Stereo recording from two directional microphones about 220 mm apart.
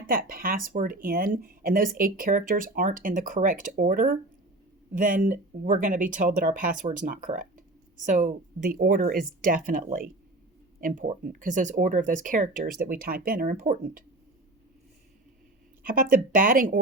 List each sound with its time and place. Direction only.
0.1 s speech: 40° right (ahead or behind)
15.8 s speech: 40° right (ahead or behind)